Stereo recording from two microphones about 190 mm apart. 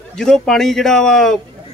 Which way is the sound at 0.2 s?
5° left (ahead or behind).